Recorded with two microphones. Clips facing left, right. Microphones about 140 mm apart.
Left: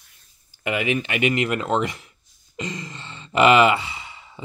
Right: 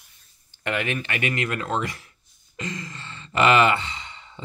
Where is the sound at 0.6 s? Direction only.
10° left (ahead or behind).